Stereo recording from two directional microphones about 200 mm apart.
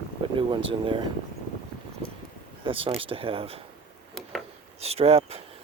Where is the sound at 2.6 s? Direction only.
25° right (ahead or behind).